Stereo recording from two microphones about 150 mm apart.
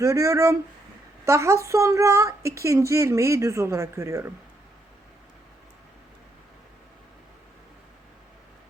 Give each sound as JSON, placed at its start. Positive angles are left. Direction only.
{"t": 0.0, "sound": "a woman's voice", "side_deg": -20}